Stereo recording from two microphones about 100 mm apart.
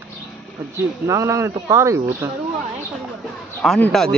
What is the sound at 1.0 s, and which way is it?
Speech, 30° right (ahead or behind).